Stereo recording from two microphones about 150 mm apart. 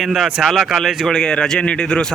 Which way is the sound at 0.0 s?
Centre (ahead or behind).